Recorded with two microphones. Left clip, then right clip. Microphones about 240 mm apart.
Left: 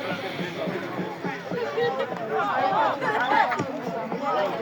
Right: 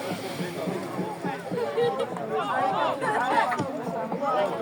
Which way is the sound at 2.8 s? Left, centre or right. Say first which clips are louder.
Left 2 dB; left.